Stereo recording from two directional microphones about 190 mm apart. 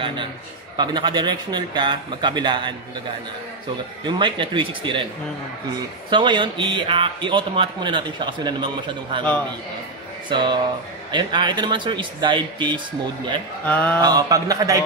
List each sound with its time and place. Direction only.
0.0 s a man's voice: 25° right (ahead or behind)
4.0 s a man's voice: 25° right (ahead or behind)
6.0 s a man's voice: 25° right (ahead or behind)
10.3 s a man's voice: 25° right (ahead or behind)
13.7 s a sound: 10° left (ahead or behind)
14.0 s a man's voice: 20° right (ahead or behind)